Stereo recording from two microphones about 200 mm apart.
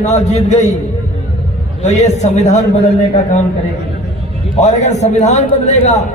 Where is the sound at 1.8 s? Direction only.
35° left (ahead or behind).